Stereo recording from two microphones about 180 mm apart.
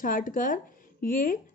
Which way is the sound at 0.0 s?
50° left (ahead or behind).